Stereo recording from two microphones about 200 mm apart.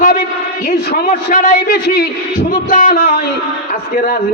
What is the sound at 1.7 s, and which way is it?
Speech, 50° left (ahead or behind).